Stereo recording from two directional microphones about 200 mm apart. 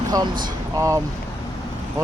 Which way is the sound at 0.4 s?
15° right (ahead or behind).